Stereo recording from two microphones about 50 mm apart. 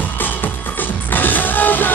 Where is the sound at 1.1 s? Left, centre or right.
Left.